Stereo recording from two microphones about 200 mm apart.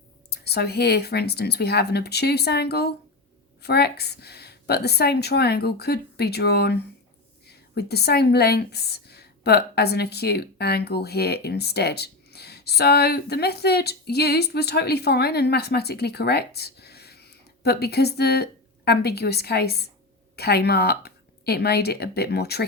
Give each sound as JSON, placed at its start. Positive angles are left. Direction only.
{"t": 0.3, "sound": "a woman's voice", "side_deg": 55}